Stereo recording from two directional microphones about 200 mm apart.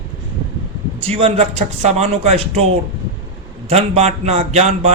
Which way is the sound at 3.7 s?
30° right (ahead or behind).